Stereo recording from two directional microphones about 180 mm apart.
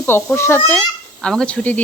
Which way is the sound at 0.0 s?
10° left (ahead or behind).